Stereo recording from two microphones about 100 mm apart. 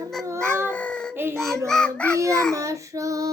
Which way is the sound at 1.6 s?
5° left (ahead or behind).